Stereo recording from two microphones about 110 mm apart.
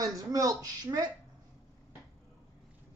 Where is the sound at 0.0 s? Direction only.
30° right (ahead or behind).